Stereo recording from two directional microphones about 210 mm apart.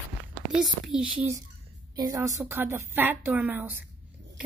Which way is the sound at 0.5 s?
5° right (ahead or behind).